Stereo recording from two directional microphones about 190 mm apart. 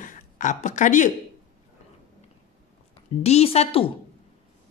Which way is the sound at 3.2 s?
35° left (ahead or behind).